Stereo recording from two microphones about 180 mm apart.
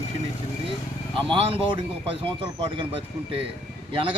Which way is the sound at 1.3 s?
30° right (ahead or behind).